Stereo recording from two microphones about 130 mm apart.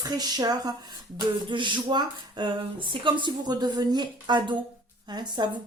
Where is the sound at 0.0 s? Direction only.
30° right (ahead or behind).